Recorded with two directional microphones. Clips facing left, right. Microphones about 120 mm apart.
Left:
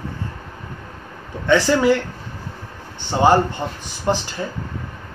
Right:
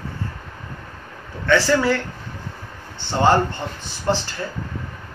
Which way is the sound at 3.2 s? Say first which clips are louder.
Left 2 dB; 15° left (ahead or behind).